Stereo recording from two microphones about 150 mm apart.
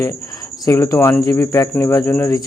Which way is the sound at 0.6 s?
20° left (ahead or behind).